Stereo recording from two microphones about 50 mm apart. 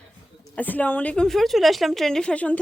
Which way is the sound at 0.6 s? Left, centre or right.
Left.